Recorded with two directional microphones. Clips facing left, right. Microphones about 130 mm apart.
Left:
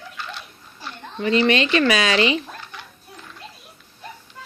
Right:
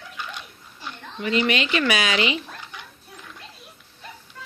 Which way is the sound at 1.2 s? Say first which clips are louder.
Left 4 dB; 35° left (ahead or behind).